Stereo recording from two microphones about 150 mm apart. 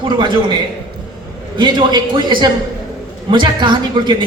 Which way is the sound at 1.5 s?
30° right (ahead or behind).